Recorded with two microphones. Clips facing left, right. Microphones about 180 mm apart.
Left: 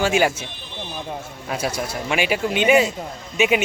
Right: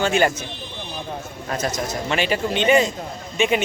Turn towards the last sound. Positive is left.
turn(degrees=5)  # may be behind; listen again after turning